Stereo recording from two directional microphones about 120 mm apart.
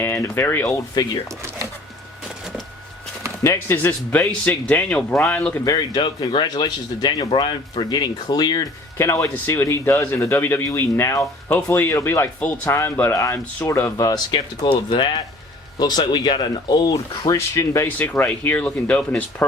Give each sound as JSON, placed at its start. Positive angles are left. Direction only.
{"t": 0.0, "sound": "speech", "side_deg": 20}
{"t": 3.4, "sound": "speech", "side_deg": 20}
{"t": 5.6, "sound": "speech", "side_deg": 35}
{"t": 9.0, "sound": "speech", "side_deg": 25}
{"t": 12.4, "sound": "speech", "side_deg": 10}
{"t": 12.7, "sound": "speech", "side_deg": 20}
{"t": 17.3, "sound": "speech", "side_deg": 25}